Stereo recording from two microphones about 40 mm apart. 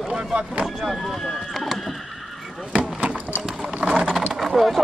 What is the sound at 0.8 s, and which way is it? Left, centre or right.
Horse, centre.